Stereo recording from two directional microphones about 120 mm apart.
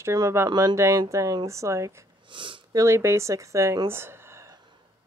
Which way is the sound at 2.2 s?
45° right (ahead or behind).